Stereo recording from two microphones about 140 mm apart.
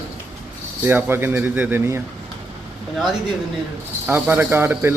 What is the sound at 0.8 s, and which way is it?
Speech, 15° right (ahead or behind).